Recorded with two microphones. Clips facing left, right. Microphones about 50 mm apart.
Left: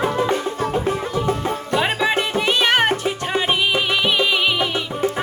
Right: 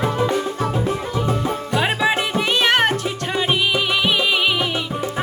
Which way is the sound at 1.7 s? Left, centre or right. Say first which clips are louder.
Even; centre.